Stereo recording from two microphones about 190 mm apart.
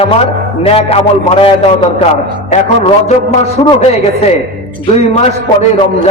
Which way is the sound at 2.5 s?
35° left (ahead or behind).